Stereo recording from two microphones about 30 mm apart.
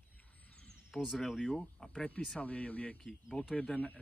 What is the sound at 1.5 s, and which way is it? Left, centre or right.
Speech, centre.